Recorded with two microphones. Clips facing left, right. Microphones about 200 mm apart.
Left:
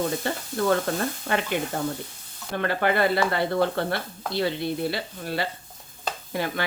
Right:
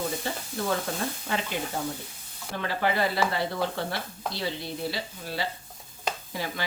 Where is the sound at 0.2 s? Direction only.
60° left (ahead or behind).